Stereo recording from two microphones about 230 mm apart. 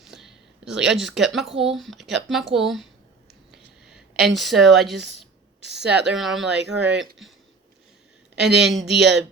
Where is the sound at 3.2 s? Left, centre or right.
Centre.